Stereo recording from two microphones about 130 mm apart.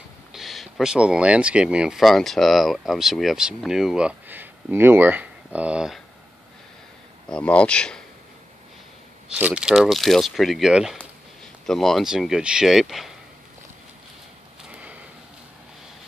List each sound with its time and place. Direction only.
0.3 s speech: centre (ahead or behind)
7.2 s speech: 10° left (ahead or behind)
9.3 s speech: 10° right (ahead or behind)
14.6 s a sound: 10° right (ahead or behind)